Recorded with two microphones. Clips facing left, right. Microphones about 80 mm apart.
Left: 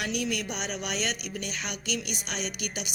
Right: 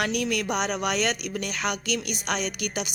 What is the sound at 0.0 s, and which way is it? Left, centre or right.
A woman's voice, right.